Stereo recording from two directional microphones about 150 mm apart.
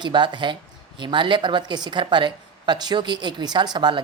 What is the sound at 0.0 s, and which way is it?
A woman's voice, 30° right (ahead or behind).